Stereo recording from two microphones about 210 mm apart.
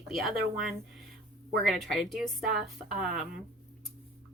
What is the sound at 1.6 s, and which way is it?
Speech, centre (ahead or behind).